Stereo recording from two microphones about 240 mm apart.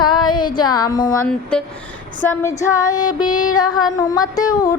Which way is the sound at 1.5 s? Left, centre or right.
Centre.